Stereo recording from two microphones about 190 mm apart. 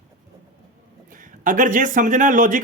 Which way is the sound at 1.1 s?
45° right (ahead or behind).